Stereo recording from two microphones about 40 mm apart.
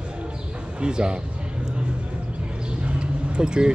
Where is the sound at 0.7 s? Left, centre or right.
Right.